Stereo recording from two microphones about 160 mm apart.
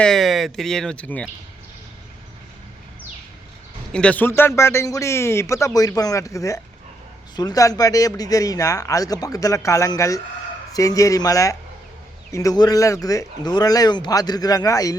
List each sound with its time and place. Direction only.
0.0 s speech: centre (ahead or behind)
3.9 s speech: 10° left (ahead or behind)